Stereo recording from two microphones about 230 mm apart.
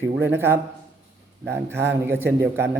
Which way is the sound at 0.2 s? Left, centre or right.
Centre.